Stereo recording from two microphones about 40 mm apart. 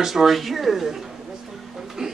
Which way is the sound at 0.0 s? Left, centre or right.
Centre.